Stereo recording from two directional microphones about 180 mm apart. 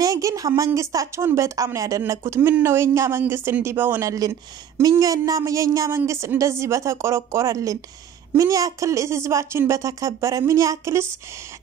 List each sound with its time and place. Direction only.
0.0 s speech: 20° right (ahead or behind)